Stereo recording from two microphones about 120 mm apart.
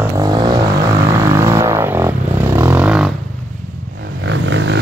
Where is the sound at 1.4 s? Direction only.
25° right (ahead or behind).